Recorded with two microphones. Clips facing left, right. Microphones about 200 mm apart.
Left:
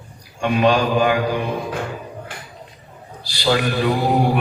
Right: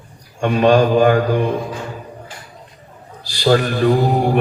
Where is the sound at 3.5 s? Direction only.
45° right (ahead or behind).